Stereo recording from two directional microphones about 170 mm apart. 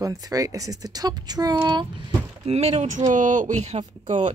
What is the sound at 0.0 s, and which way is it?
Speech, 20° right (ahead or behind).